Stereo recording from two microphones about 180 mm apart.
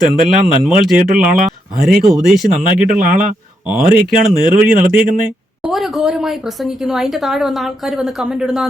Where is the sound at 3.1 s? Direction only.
45° right (ahead or behind).